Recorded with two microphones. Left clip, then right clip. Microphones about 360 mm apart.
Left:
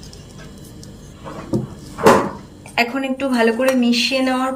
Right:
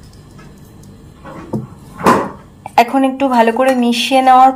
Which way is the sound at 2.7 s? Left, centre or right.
Centre.